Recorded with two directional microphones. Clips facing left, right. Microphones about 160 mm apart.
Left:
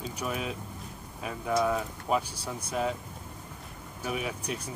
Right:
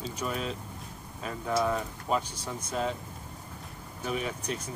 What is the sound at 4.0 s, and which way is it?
Speech, 5° left (ahead or behind).